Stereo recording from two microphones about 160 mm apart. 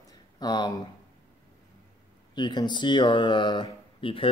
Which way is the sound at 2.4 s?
30° left (ahead or behind).